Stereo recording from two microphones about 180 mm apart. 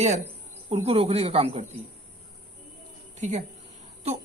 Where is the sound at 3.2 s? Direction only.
40° right (ahead or behind).